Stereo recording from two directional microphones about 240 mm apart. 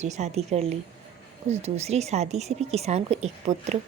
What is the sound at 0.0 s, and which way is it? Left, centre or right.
A woman's voice, right.